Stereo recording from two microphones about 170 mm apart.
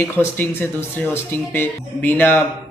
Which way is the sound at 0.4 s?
10° left (ahead or behind).